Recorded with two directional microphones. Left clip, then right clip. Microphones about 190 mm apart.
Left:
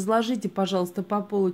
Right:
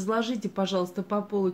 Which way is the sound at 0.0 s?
40° left (ahead or behind).